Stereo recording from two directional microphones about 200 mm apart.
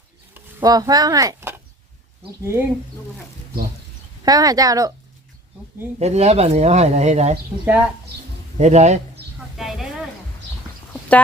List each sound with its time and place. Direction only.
0.3 s speech: 20° right (ahead or behind)
4.2 s speech: 20° right (ahead or behind)
6.0 s speech: 30° right (ahead or behind)
7.6 s speech: 5° right (ahead or behind)
8.5 s speech: 35° right (ahead or behind)
9.6 s a sound: centre (ahead or behind)